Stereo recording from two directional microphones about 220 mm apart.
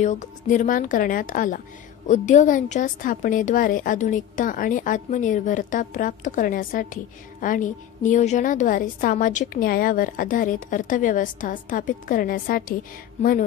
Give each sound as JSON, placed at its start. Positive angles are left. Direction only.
{"t": 0.0, "sound": "a woman's voice", "side_deg": 35}